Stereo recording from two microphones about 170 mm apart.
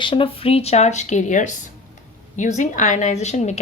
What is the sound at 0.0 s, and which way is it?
A woman's voice, 30° left (ahead or behind).